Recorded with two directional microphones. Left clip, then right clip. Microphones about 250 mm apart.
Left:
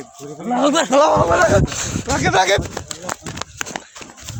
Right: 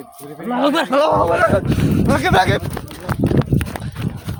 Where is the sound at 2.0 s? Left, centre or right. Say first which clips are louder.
Right 1 dB; right.